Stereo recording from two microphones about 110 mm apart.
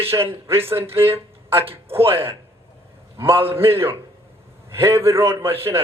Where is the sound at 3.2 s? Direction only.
20° right (ahead or behind).